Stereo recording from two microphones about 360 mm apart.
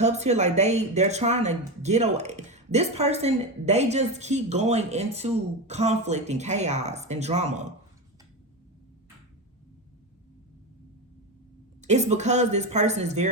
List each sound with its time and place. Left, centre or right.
0.0 s speech: centre
11.8 s speech: centre